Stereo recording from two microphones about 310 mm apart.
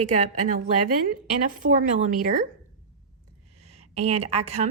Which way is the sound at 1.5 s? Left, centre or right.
Right.